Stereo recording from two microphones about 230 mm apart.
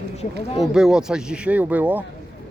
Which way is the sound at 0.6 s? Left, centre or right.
Centre.